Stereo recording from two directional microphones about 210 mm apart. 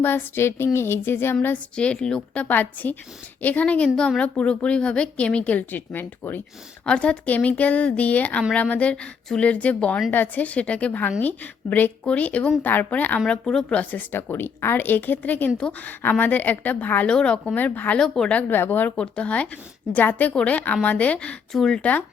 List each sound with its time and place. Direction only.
0.0 s a woman's voice: 10° left (ahead or behind)